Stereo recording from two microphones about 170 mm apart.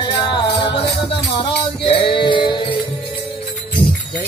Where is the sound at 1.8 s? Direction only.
30° left (ahead or behind).